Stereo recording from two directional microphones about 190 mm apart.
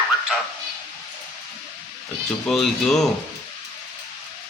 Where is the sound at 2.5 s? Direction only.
Centre (ahead or behind).